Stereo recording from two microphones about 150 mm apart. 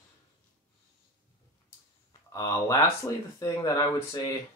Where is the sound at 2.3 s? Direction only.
20° left (ahead or behind).